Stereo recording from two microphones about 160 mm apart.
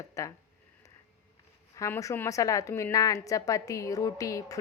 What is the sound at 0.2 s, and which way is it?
Speech, 20° left (ahead or behind).